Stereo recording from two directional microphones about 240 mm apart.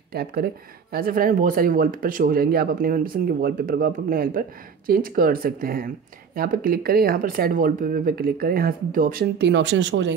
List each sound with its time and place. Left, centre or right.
0.1 s speech: right